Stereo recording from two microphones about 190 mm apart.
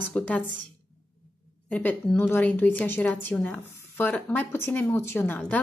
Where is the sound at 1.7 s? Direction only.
10° left (ahead or behind).